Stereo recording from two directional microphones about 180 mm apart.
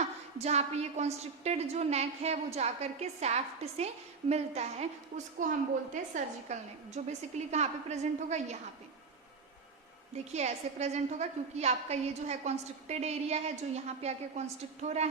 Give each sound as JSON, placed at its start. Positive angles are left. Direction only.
{"t": 0.0, "sound": "a woman's voice", "side_deg": -35}
{"t": 10.3, "sound": "a woman's voice", "side_deg": -40}